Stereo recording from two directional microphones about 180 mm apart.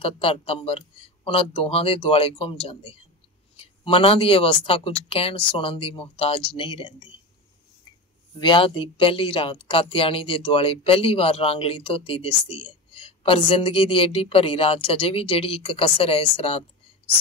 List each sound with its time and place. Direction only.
0.0 s speech: 30° left (ahead or behind)
8.4 s speech: 25° left (ahead or behind)